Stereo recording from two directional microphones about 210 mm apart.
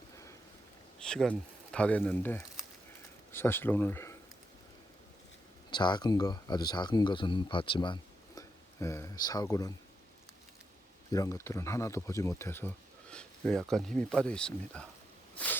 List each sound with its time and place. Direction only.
0.9 s speech: 5° left (ahead or behind)
5.7 s speech: 20° left (ahead or behind)
11.1 s speech: 15° left (ahead or behind)